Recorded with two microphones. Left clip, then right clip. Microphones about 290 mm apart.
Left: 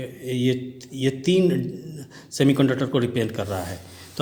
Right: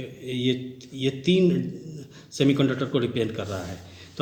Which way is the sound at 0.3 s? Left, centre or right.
Left.